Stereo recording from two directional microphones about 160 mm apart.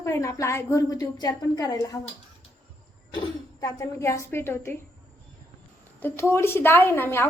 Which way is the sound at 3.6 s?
20° left (ahead or behind).